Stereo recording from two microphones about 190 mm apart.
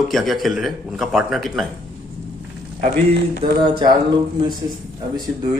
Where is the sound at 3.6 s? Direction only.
25° right (ahead or behind).